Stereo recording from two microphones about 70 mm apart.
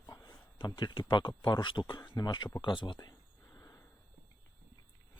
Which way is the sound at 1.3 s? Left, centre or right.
Left.